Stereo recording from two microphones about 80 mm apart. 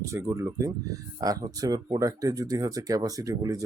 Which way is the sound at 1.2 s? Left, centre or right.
Right.